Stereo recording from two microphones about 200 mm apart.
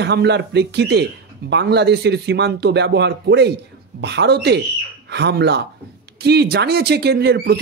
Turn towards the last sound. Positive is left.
turn(degrees=-55)  # may be behind; listen again after turning